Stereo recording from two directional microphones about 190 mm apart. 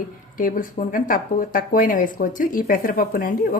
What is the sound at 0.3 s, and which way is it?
Speech, 45° left (ahead or behind).